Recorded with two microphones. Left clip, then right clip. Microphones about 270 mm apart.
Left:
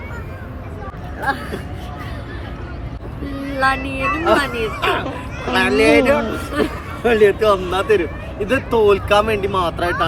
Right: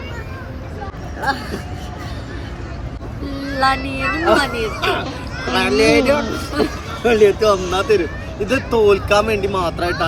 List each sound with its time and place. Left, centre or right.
1.2 s speech: centre
3.6 s speech: centre